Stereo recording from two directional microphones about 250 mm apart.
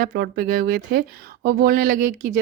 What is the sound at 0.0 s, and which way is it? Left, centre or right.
Speech, right.